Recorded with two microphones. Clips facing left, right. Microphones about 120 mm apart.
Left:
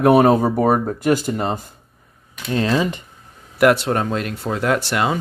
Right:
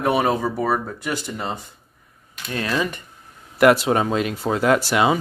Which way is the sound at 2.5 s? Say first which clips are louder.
Left 5 dB; 25° left (ahead or behind).